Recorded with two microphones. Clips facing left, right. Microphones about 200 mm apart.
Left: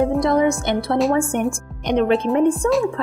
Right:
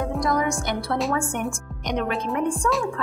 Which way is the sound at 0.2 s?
25° left (ahead or behind).